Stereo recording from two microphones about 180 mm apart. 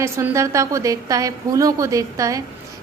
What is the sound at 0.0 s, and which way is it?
A woman's voice, 15° right (ahead or behind).